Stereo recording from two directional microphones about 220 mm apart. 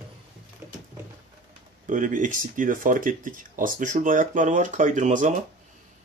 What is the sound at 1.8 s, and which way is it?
Speech, 35° right (ahead or behind).